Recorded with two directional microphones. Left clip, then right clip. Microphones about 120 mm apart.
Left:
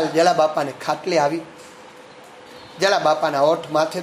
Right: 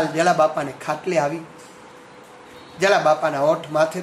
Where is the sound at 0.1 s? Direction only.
5° left (ahead or behind).